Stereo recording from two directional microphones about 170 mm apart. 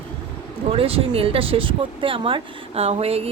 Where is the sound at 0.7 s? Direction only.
35° right (ahead or behind).